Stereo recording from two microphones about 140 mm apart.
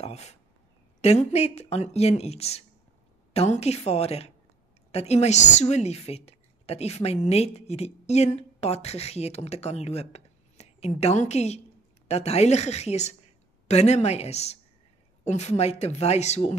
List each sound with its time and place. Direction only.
0.0 s a woman's voice: 50° left (ahead or behind)